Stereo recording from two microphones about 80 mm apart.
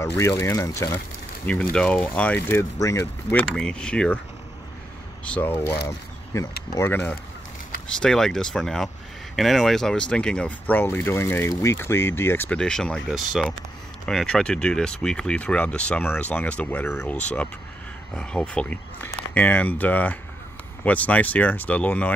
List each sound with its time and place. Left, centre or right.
0.0 s speech: left
1.4 s speech: centre
2.4 s speech: left
3.4 s speech: centre
5.2 s speech: centre
5.7 s speech: left
6.9 s speech: left
8.0 s speech: centre
10.7 s speech: left
12.4 s speech: centre